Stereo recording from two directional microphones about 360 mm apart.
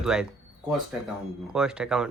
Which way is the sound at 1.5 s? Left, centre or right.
Centre.